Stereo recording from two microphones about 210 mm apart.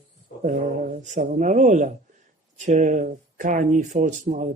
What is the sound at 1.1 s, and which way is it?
Speech, 35° right (ahead or behind).